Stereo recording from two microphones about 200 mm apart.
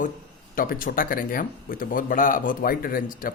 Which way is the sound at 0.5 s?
45° left (ahead or behind).